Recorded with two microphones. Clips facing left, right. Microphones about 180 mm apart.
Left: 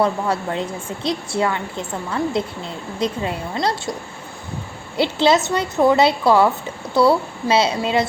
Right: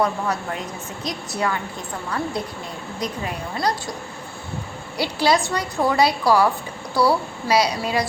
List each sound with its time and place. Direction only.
0.0 s a woman's voice: 25° left (ahead or behind)
4.9 s a woman's voice: 25° left (ahead or behind)